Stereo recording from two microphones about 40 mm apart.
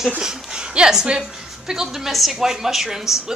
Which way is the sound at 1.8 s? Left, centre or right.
Centre.